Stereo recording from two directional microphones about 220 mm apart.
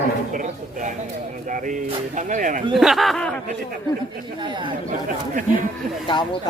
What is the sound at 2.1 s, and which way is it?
Speech, 35° right (ahead or behind).